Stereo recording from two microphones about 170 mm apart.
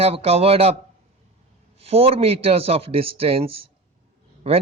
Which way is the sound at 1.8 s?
35° right (ahead or behind).